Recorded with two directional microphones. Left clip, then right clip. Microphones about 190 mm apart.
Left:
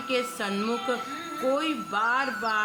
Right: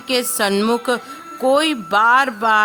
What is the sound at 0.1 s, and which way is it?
A woman's voice, 50° right (ahead or behind).